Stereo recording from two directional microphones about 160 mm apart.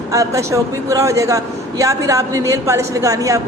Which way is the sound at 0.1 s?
20° right (ahead or behind).